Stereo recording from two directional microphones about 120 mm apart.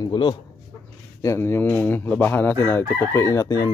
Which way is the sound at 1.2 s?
20° left (ahead or behind).